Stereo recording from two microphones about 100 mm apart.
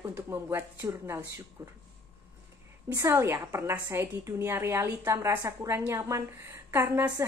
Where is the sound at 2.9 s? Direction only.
25° right (ahead or behind).